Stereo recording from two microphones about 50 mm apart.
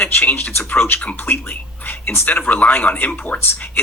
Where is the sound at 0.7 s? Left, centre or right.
Left.